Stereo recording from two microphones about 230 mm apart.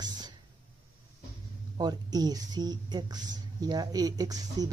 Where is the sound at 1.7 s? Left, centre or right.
Centre.